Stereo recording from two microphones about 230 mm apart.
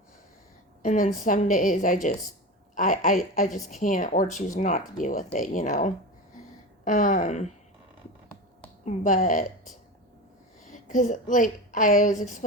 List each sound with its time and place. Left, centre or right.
0.8 s a woman's voice: left
8.8 s a woman's voice: left